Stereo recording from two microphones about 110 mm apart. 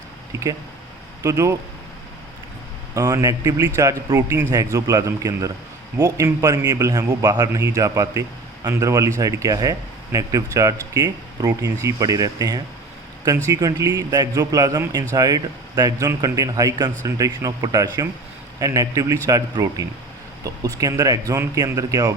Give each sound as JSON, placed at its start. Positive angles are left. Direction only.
{"t": 1.2, "sound": "speech", "side_deg": -30}
{"t": 2.9, "sound": "speech", "side_deg": -30}